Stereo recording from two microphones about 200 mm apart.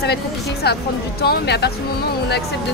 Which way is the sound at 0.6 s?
55° left (ahead or behind).